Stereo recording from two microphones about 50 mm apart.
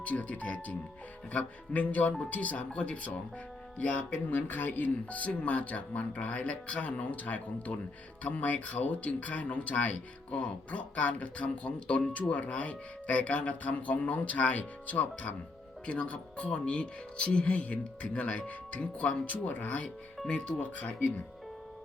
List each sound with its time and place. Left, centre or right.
0.0 s speech: left